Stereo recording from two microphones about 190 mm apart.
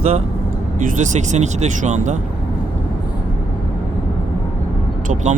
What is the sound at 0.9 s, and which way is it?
Speech, 40° right (ahead or behind).